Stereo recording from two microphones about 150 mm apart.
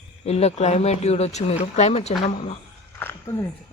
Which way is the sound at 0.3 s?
45° left (ahead or behind).